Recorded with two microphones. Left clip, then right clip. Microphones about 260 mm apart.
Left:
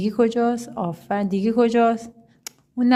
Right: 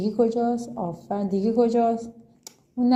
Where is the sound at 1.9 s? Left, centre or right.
Left.